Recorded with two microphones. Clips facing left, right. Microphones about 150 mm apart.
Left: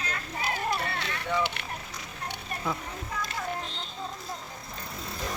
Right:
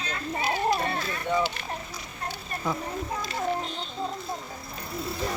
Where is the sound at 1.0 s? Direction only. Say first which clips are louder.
Right 3 dB; 75° left (ahead or behind).